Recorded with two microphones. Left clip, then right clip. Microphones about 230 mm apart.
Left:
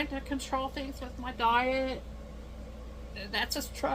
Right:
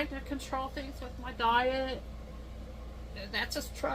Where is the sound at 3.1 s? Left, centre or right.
Left.